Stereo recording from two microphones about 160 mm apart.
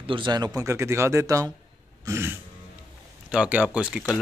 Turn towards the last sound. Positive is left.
turn(degrees=-5)  # may be behind; listen again after turning